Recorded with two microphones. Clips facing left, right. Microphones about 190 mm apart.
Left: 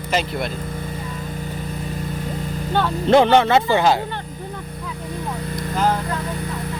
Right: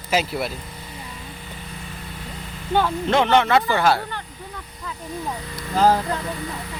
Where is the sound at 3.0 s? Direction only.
35° left (ahead or behind).